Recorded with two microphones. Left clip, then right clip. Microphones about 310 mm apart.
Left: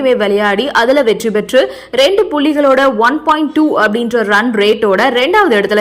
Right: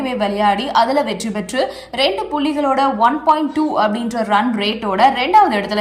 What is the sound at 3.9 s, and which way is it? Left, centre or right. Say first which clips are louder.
A woman's voice: left 5 dB; centre.